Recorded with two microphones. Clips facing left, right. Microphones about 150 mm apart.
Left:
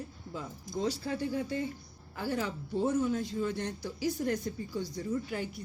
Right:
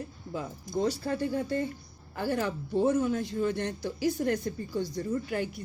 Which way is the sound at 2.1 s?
60° right (ahead or behind).